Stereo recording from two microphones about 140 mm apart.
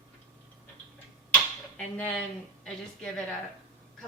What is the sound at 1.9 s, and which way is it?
Speech, 5° left (ahead or behind).